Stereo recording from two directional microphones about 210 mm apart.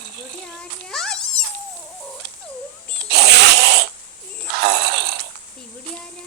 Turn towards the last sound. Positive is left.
turn(degrees=-50)  # may be behind; listen again after turning